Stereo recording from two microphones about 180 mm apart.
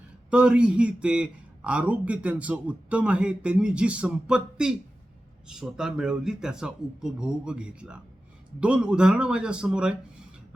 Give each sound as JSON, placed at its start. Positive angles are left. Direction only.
{"t": 0.3, "sound": "a man's voice", "side_deg": -5}